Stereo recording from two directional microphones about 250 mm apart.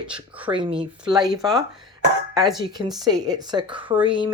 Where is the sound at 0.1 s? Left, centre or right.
Centre.